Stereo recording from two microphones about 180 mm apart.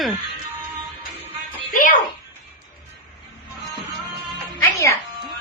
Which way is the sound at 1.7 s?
50° left (ahead or behind).